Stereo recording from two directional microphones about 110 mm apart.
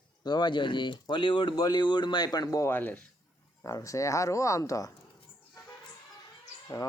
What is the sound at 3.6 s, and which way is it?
Speech, 30° left (ahead or behind).